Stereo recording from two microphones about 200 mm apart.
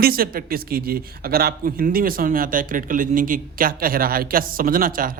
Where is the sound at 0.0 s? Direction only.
45° right (ahead or behind).